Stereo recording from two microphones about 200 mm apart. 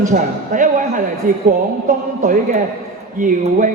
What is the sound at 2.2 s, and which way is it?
A man's voice, 40° right (ahead or behind).